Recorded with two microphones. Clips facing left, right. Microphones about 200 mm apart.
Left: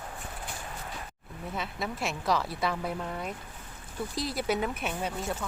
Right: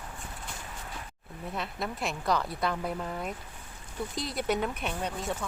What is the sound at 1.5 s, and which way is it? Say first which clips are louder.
Speech: even; centre (ahead or behind).